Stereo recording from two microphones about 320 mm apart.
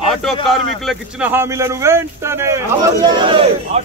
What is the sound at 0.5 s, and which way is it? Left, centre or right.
A man's voice, centre.